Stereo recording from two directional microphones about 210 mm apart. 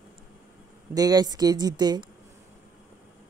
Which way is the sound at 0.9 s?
20° right (ahead or behind).